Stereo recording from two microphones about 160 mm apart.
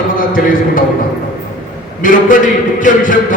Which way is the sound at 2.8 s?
55° left (ahead or behind).